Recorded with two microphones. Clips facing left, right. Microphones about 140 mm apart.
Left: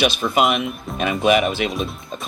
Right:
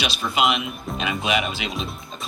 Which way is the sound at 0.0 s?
50° left (ahead or behind).